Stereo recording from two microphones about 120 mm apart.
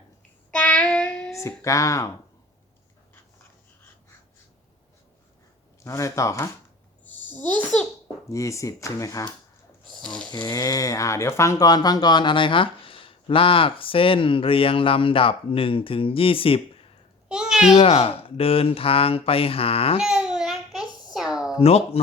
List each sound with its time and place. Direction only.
0.5 s child singing: 10° left (ahead or behind)
1.4 s speech: 25° left (ahead or behind)
5.8 s speech: 25° left (ahead or behind)
7.0 s a sound: 15° left (ahead or behind)
8.3 s speech: 25° left (ahead or behind); by 16.9 s 50° left (ahead or behind)
17.2 s a sound: 5° right (ahead or behind)
17.7 s speech: 55° left (ahead or behind)
20.0 s a sound: 5° right (ahead or behind)
21.6 s speech: 55° left (ahead or behind)